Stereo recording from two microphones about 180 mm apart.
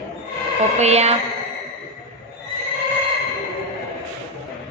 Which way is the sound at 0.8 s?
35° right (ahead or behind).